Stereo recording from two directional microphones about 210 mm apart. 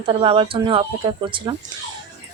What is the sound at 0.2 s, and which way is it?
Speech, 25° right (ahead or behind).